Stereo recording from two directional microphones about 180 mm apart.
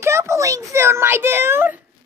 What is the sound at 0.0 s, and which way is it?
A child's voice, 15° right (ahead or behind).